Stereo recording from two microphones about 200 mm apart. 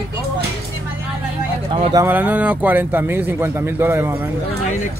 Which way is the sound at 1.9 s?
15° right (ahead or behind).